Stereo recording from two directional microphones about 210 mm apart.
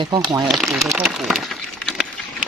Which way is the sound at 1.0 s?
Centre (ahead or behind).